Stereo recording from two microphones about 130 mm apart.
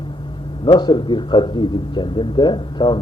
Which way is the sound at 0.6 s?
35° left (ahead or behind).